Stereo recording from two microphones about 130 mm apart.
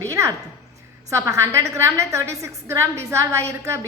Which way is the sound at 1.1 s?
25° right (ahead or behind).